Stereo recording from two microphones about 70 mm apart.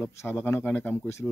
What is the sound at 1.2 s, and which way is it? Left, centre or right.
Speech, centre.